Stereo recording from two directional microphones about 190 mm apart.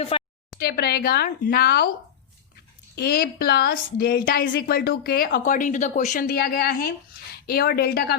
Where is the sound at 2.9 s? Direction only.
55° left (ahead or behind).